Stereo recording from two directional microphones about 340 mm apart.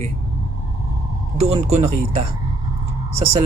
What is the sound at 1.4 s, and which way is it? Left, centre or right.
Speech, centre.